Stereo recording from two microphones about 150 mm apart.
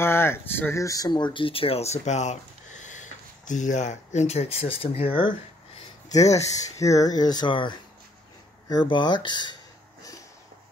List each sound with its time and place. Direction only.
0.0 s speech: 15° left (ahead or behind); by 5.3 s 35° left (ahead or behind)
6.8 s speech: 20° left (ahead or behind)